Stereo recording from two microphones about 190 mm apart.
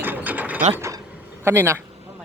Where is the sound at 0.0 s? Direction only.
10° right (ahead or behind).